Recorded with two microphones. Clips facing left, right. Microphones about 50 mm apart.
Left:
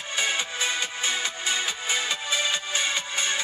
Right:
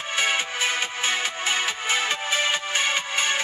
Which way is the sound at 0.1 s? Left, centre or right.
Right.